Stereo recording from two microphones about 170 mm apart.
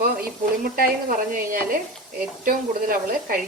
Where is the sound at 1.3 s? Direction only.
55° right (ahead or behind).